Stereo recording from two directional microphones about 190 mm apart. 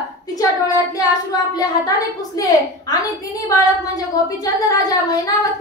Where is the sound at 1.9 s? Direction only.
20° left (ahead or behind).